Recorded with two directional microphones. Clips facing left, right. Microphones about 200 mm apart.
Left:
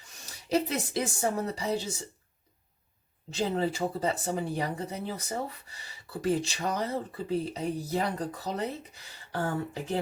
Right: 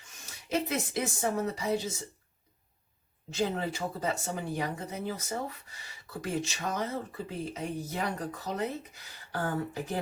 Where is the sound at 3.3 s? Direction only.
30° left (ahead or behind).